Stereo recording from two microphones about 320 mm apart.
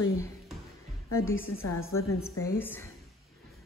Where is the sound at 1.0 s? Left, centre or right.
Left.